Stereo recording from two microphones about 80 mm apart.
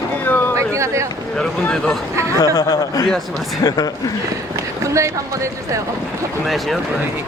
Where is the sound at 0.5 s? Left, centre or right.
Right.